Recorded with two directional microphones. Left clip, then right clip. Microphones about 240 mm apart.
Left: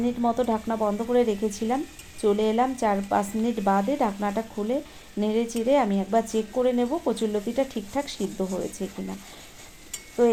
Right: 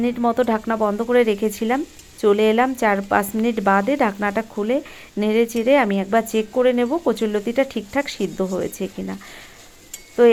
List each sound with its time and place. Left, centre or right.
0.0 s speech: right